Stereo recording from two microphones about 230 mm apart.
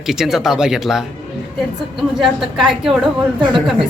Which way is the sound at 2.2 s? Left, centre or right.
Centre.